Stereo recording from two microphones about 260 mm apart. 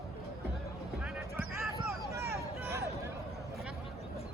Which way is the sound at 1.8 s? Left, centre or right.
Centre.